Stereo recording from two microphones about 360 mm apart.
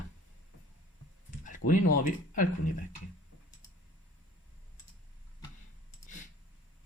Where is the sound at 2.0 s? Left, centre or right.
Left.